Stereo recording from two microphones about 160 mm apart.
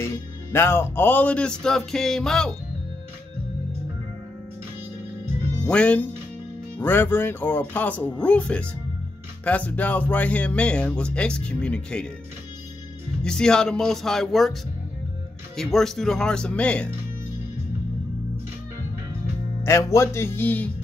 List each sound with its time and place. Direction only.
0.0 s speech: 15° left (ahead or behind)
5.7 s speech: 5° left (ahead or behind)
13.2 s speech: 5° left (ahead or behind)
15.5 s speech: centre (ahead or behind)
19.6 s speech: 15° left (ahead or behind)